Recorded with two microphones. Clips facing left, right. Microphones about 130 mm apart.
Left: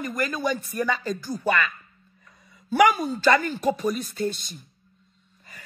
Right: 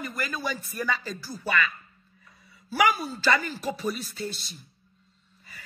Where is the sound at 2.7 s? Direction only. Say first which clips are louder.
Left 5 dB; 45° left (ahead or behind).